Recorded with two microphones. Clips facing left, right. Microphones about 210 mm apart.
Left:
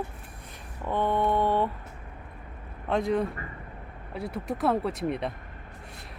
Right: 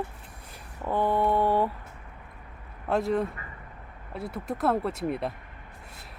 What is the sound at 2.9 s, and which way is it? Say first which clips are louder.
Speech: even; 5° right (ahead or behind).